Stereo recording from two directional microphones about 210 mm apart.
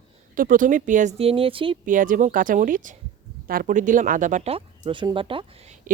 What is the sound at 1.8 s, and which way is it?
Speech, 40° right (ahead or behind).